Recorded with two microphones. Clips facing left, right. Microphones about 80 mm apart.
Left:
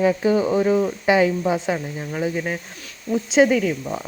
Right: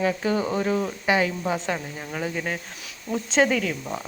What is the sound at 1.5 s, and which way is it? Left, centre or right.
Speech, centre.